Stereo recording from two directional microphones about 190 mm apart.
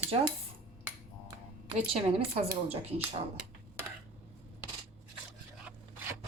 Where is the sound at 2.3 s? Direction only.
30° right (ahead or behind).